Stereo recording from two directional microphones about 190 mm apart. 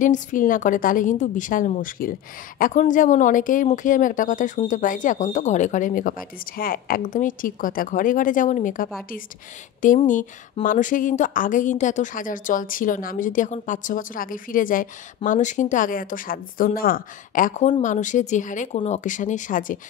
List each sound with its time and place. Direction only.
0.0 s speech: 45° left (ahead or behind)